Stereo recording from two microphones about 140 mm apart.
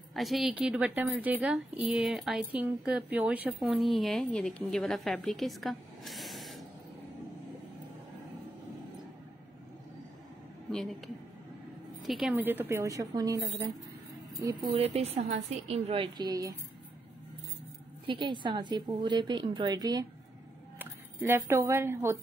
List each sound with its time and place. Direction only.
0.1 s a woman's voice: centre (ahead or behind)
3.7 s a woman's voice: centre (ahead or behind)
10.7 s a woman's voice: centre (ahead or behind)
12.1 s a woman's voice: 5° right (ahead or behind); by 14.7 s 30° right (ahead or behind)
15.0 s a woman's voice: 50° right (ahead or behind); by 16.5 s 25° right (ahead or behind)
18.0 s a woman's voice: 35° right (ahead or behind); by 22.2 s 20° right (ahead or behind)